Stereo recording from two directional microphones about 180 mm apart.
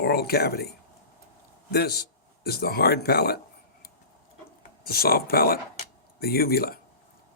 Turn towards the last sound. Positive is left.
turn(degrees=55)  # may be behind; listen again after turning